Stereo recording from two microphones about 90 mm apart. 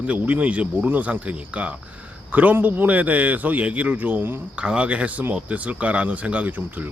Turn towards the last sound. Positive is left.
turn(degrees=-20)  # may be behind; listen again after turning